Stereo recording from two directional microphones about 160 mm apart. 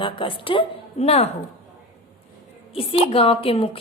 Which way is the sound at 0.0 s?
30° left (ahead or behind).